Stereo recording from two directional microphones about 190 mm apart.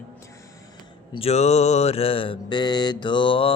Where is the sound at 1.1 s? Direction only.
30° left (ahead or behind).